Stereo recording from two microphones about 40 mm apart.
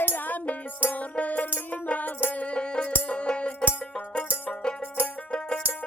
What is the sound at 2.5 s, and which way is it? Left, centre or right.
Music, left.